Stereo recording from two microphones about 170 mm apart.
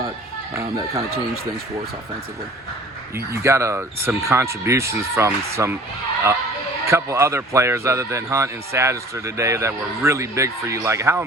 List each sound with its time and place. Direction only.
0.5 s a man's voice: 15° right (ahead or behind)
3.2 s a man's voice: 15° right (ahead or behind)
6.8 s a man's voice: 15° right (ahead or behind)